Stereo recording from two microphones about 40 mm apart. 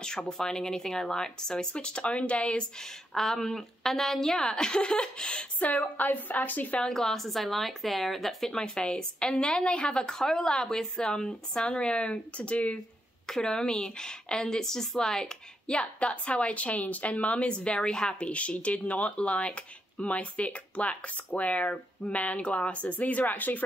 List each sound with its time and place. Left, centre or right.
0.3 s a woman's voice: centre
2.8 s a woman's voice: centre
5.6 s a woman's voice: left
6.9 s a woman's voice: centre; by 12.7 s left
13.4 s a woman's voice: left
18.3 s speech: left